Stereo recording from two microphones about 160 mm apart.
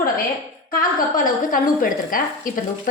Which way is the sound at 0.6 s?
60° left (ahead or behind).